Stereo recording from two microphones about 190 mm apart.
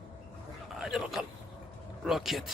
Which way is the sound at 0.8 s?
Centre (ahead or behind).